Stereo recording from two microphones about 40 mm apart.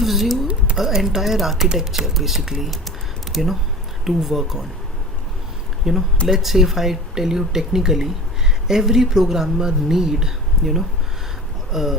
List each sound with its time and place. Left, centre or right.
0.0 s a sound: centre
0.8 s speech: centre
5.9 s speech: centre